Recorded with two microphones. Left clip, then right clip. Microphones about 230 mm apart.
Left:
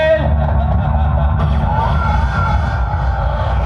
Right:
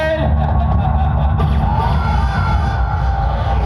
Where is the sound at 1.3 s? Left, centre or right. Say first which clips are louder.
Left 1 dB; right.